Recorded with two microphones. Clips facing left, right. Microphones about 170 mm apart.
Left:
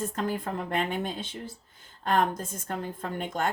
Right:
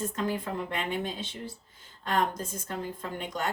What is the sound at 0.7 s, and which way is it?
Speech, 50° left (ahead or behind).